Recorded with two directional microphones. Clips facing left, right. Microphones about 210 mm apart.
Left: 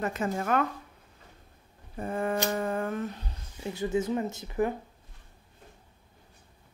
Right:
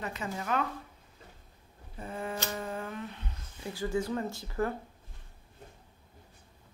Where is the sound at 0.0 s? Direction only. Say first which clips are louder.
Left 7 dB; 50° left (ahead or behind).